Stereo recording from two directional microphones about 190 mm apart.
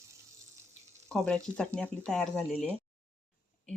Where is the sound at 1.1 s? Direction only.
5° left (ahead or behind).